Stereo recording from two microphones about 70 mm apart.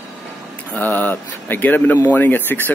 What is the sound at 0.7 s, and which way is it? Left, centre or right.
Speech, left.